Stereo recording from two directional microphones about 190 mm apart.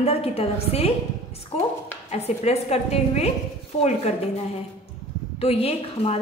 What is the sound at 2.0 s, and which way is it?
A woman's voice, 35° left (ahead or behind).